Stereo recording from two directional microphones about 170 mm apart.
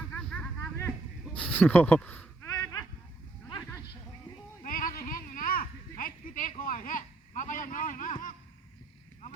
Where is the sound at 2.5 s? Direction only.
20° left (ahead or behind).